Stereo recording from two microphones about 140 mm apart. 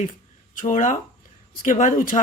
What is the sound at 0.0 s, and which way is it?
Speech, 65° left (ahead or behind).